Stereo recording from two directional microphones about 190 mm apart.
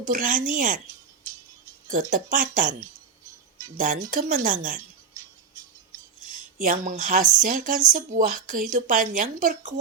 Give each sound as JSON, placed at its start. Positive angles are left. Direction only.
{"t": 0.1, "sound": "speech", "side_deg": -45}
{"t": 1.9, "sound": "speech", "side_deg": -45}
{"t": 3.8, "sound": "speech", "side_deg": -45}
{"t": 6.6, "sound": "speech", "side_deg": -45}